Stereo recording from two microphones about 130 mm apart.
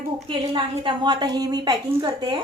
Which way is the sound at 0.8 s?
35° right (ahead or behind).